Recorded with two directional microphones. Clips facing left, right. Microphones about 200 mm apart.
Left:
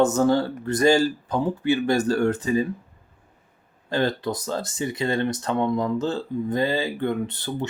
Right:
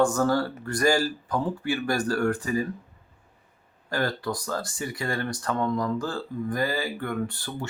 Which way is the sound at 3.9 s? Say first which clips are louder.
Left 4 dB; 20° left (ahead or behind).